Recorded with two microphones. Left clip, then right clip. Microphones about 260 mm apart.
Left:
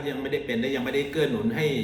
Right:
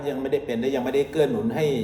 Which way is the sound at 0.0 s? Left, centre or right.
Centre.